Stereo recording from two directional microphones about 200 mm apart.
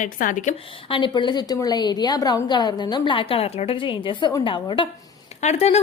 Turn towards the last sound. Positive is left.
turn(degrees=35)  # may be behind; listen again after turning